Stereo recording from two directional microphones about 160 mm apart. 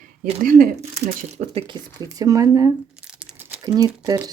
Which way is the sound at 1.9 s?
20° right (ahead or behind).